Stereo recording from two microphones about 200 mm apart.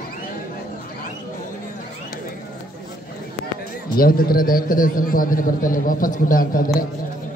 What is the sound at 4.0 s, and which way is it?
A man's voice, 45° left (ahead or behind).